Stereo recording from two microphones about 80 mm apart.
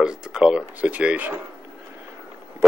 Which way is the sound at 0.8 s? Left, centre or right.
Centre.